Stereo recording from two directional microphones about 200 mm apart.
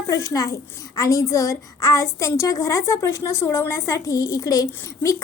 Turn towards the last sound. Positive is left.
turn(degrees=15)  # may be behind; listen again after turning